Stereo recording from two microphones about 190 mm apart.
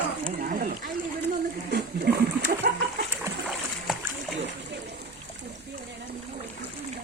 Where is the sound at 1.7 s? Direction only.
60° right (ahead or behind).